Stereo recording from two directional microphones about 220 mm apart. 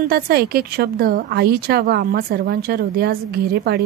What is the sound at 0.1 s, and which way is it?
A woman's voice, 45° right (ahead or behind).